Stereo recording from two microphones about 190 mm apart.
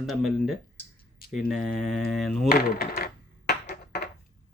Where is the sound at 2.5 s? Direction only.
55° left (ahead or behind).